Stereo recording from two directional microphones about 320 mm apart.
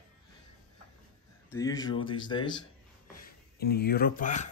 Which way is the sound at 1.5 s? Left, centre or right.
Centre.